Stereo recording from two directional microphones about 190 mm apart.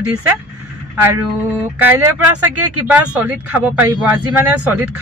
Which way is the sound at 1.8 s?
10° right (ahead or behind).